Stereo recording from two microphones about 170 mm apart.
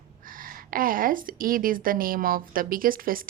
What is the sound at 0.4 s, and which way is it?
A woman's voice, 55° right (ahead or behind).